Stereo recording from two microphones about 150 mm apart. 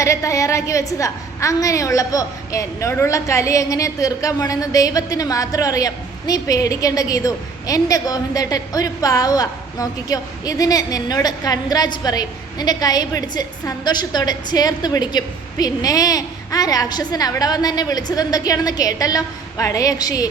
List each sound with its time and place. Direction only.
0.0 s a woman's voice: 20° left (ahead or behind)